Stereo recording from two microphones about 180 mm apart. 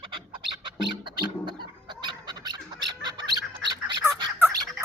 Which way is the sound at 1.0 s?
25° right (ahead or behind).